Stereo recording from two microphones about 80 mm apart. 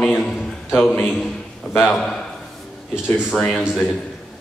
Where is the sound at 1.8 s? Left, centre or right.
Centre.